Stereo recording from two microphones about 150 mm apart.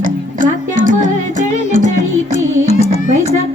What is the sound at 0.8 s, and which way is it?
Music, 55° left (ahead or behind).